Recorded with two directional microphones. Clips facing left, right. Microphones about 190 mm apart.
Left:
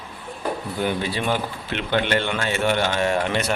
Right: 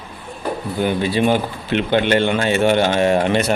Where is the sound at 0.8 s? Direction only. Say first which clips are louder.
Right 7 dB; 20° right (ahead or behind).